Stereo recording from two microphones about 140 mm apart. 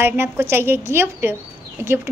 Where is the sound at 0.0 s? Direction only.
15° right (ahead or behind).